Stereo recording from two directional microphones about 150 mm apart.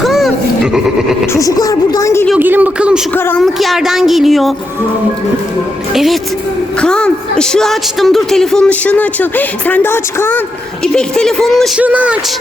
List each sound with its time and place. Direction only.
0.0 s grunt: centre (ahead or behind)
1.3 s a woman's voice: 25° left (ahead or behind)
2.4 s speech: 10° right (ahead or behind)
3.2 s speech: 15° left (ahead or behind)
3.4 s a woman's voice: centre (ahead or behind)
5.9 s a woman's voice: centre (ahead or behind); by 10.4 s 15° left (ahead or behind)
10.9 s a woman's voice: 5° left (ahead or behind)
11.8 s speech: 10° right (ahead or behind)